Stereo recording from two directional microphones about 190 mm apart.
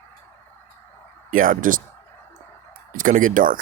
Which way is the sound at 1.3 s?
45° right (ahead or behind).